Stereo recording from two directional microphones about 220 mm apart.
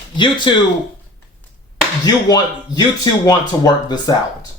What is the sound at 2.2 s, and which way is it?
Speech, 20° left (ahead or behind).